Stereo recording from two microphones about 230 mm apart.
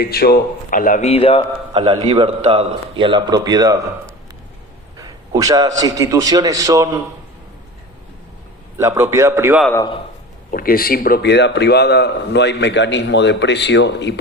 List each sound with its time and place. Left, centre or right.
0.0 s a man's voice: left
1.7 s a man's voice: right
4.9 s a man's voice: centre
8.8 s a man's voice: centre
9.6 s a man's voice: centre
10.5 s a man's voice: left